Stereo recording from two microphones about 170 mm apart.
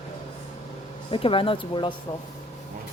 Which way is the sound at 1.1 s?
30° left (ahead or behind).